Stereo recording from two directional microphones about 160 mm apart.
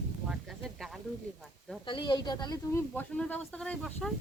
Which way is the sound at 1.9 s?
30° left (ahead or behind).